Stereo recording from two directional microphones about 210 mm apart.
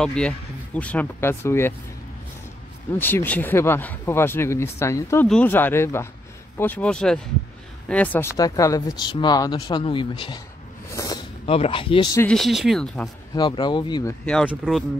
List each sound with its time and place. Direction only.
0.0 s speech: 5° left (ahead or behind)
3.0 s speech: 10° left (ahead or behind)
10.9 s a sound: 15° left (ahead or behind)
11.4 s speech: 25° left (ahead or behind)
12.3 s speech: centre (ahead or behind)
13.3 s speech: 20° left (ahead or behind)
14.2 s speech: 5° left (ahead or behind)